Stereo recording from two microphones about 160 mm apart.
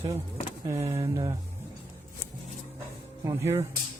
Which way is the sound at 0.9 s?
20° right (ahead or behind).